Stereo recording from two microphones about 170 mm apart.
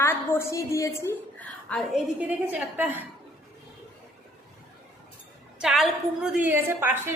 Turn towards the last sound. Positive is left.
turn(degrees=-10)  # may be behind; listen again after turning